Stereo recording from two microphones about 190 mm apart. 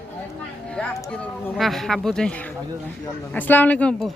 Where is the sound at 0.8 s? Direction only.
5° left (ahead or behind).